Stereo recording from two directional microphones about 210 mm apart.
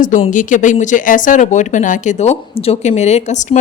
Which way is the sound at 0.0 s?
40° left (ahead or behind).